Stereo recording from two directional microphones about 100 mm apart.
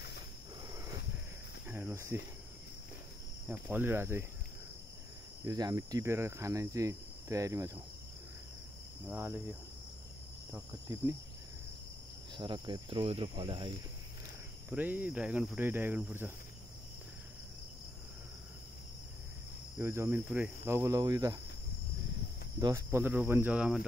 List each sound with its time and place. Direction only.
0.7 s a sound: 35° right (ahead or behind)
1.7 s speech: 20° right (ahead or behind)
3.4 s speech: 20° right (ahead or behind)
5.4 s cricket: 40° right (ahead or behind)
9.0 s cricket: 20° right (ahead or behind)
10.5 s speech: 30° right (ahead or behind)
12.4 s cricket: 50° right (ahead or behind)
14.7 s cricket: 15° right (ahead or behind)
19.8 s speech: 25° right (ahead or behind)
20.3 s cricket: 20° right (ahead or behind)
22.6 s speech: 30° right (ahead or behind); by 23.9 s 10° right (ahead or behind)